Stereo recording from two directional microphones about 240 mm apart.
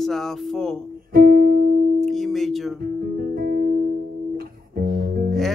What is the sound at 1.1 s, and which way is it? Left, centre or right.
Music, right.